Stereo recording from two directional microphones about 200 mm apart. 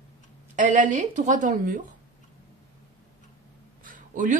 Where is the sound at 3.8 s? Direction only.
40° right (ahead or behind).